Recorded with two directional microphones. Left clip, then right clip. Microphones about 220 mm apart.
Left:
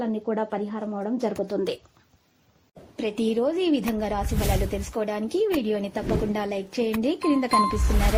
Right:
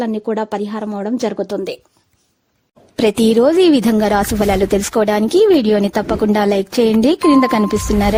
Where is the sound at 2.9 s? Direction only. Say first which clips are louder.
Right 13 dB; 55° right (ahead or behind).